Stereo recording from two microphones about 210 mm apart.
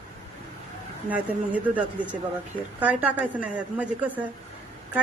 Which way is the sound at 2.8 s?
5° right (ahead or behind).